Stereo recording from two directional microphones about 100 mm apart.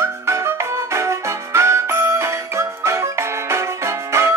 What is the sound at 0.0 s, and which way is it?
Music, 30° right (ahead or behind).